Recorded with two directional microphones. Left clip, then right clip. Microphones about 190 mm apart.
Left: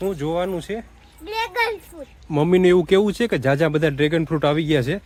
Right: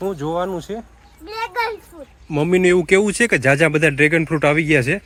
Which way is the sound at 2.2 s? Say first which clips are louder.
Right 1 dB; 5° left (ahead or behind).